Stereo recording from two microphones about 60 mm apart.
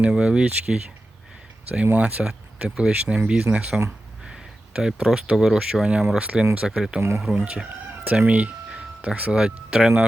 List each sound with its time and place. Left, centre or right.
0.0 s speech: centre
2.2 s speech: centre
6.1 s speech: right
9.3 s speech: centre